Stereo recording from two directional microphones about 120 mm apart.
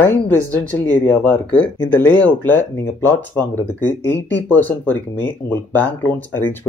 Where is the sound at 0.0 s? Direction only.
15° left (ahead or behind).